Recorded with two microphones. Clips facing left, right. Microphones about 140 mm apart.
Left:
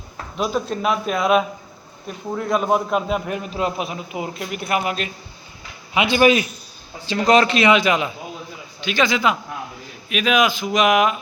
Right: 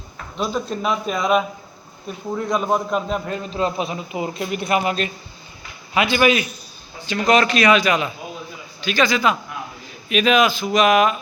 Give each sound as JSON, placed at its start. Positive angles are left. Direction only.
{"t": 0.3, "sound": "a man's voice", "side_deg": 5}
{"t": 6.1, "sound": "a man's voice", "side_deg": 35}
{"t": 10.1, "sound": "speech", "side_deg": 5}